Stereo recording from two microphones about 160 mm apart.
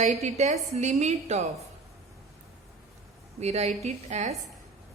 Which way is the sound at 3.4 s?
40° right (ahead or behind).